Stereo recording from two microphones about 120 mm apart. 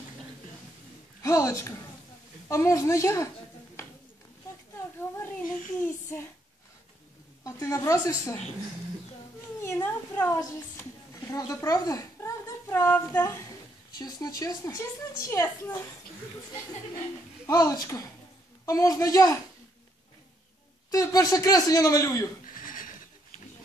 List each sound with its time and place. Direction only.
1.2 s a woman's voice: 25° left (ahead or behind)
7.4 s a woman's voice: 25° left (ahead or behind)
9.6 s a child's voice: 20° left (ahead or behind)
13.9 s a woman's voice: 35° left (ahead or behind)
17.5 s a woman's voice: 30° left (ahead or behind)
20.9 s a woman's voice: 30° left (ahead or behind)